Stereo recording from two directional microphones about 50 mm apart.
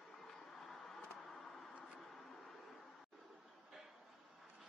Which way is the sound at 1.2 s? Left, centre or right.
Centre.